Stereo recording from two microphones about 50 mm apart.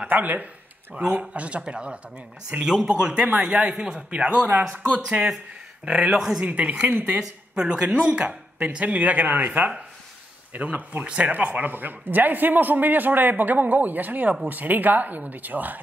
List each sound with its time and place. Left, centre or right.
0.1 s a man's voice: right
6.1 s speech: centre
6.5 s speech: right
6.9 s a man's voice: right
7.8 s a man's voice: right
10.5 s a man's voice: right
11.3 s a man's voice: right